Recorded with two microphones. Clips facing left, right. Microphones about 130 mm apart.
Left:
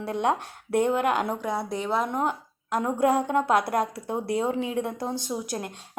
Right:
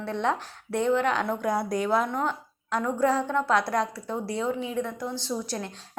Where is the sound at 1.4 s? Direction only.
Centre (ahead or behind).